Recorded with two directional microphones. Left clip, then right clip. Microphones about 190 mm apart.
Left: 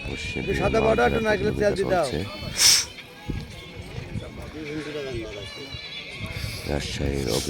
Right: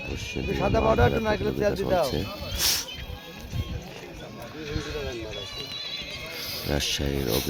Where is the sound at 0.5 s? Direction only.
75° left (ahead or behind).